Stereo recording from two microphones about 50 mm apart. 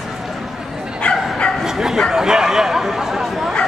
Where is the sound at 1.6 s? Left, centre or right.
Centre.